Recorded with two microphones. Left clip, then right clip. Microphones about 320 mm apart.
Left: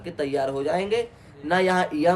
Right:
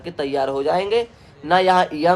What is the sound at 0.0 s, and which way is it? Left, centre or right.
Speech, centre.